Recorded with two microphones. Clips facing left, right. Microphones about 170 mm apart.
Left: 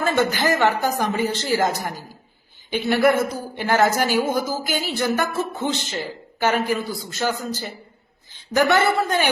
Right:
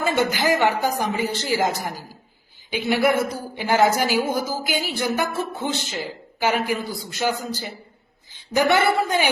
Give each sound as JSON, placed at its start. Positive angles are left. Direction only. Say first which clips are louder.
{"t": 0.2, "sound": "a woman's voice", "louder": "even", "side_deg": -15}